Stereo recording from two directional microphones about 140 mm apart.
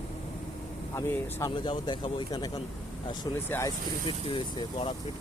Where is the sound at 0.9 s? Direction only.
20° left (ahead or behind).